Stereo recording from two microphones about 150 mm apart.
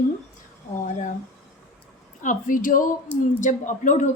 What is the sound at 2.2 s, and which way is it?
A woman's voice, 60° left (ahead or behind).